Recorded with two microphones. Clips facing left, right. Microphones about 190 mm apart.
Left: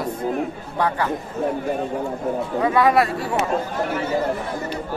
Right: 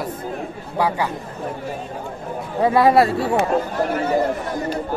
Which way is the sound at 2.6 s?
30° right (ahead or behind).